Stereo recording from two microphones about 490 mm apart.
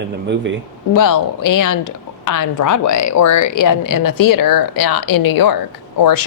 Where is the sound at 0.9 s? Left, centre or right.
Left.